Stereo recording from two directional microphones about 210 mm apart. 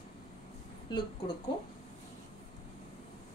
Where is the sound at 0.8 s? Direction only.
20° left (ahead or behind).